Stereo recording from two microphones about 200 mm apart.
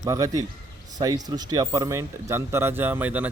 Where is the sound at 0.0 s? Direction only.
15° right (ahead or behind).